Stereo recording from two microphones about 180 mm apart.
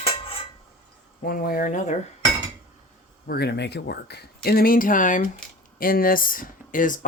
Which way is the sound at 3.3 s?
65° left (ahead or behind).